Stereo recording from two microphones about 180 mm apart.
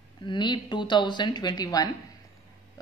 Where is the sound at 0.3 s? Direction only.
25° left (ahead or behind).